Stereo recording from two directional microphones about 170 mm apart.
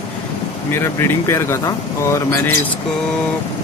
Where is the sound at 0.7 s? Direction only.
15° left (ahead or behind).